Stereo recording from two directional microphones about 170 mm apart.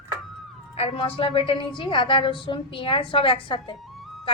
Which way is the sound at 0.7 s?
35° left (ahead or behind).